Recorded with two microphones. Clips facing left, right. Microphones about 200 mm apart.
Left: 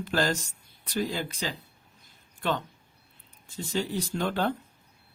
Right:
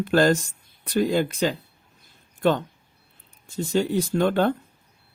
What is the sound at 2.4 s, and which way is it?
Speech, 45° right (ahead or behind).